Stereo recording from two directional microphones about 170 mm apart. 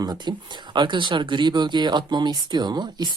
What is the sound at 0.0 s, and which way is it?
Speech, 25° right (ahead or behind).